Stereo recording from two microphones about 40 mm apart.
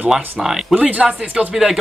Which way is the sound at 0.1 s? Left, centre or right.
Centre.